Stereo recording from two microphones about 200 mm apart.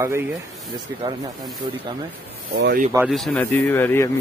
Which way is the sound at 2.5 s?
55° right (ahead or behind).